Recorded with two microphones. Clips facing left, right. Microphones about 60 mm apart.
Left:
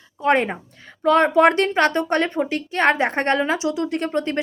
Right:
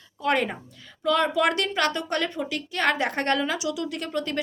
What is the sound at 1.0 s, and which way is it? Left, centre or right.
Speech, left.